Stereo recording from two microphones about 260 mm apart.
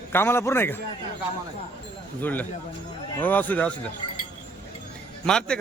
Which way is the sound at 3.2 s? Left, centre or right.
Centre.